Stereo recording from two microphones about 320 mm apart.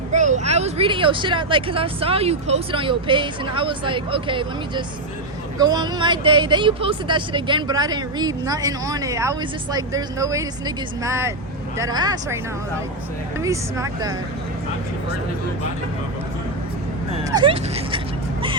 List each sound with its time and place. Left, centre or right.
0.1 s speech: right
13.4 s speech: centre
17.1 s speech: centre